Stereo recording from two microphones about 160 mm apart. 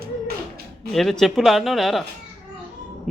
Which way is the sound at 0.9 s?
Centre (ahead or behind).